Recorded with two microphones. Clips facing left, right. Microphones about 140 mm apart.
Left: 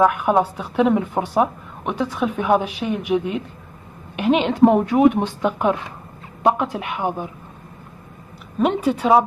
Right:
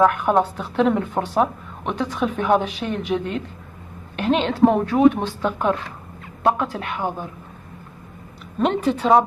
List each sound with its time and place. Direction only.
0.0 s speech: 5° left (ahead or behind)
8.5 s speech: 5° left (ahead or behind)